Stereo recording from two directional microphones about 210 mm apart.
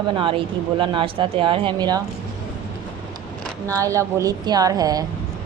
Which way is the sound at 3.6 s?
15° right (ahead or behind).